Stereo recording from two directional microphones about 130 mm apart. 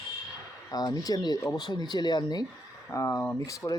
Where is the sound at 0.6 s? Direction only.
30° left (ahead or behind).